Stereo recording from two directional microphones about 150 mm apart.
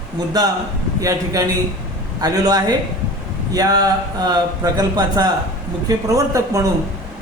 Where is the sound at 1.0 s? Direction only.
25° right (ahead or behind).